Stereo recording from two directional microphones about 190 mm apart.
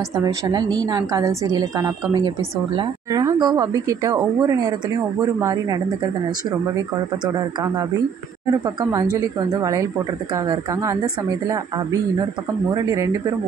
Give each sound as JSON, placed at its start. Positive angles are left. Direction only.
{"t": 0.1, "sound": "a woman's voice", "side_deg": -20}
{"t": 7.3, "sound": "a woman's voice", "side_deg": -20}